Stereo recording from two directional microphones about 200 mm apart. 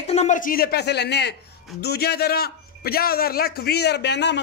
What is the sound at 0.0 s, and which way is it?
A man's voice, 35° left (ahead or behind).